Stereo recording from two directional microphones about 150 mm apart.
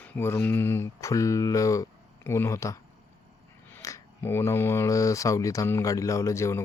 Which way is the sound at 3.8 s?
20° left (ahead or behind).